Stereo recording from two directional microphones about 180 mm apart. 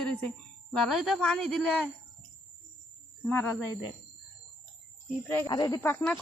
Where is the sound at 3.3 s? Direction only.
10° left (ahead or behind).